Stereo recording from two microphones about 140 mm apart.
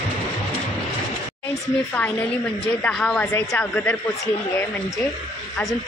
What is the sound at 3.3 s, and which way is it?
A woman's voice, 20° left (ahead or behind).